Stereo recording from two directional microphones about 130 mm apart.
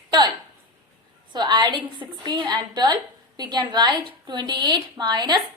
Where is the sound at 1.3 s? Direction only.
35° right (ahead or behind).